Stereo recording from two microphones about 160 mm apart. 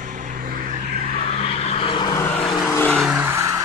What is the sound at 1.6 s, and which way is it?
Vehicle, 35° left (ahead or behind).